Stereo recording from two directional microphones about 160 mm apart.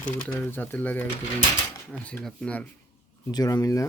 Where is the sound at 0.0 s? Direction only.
10° left (ahead or behind).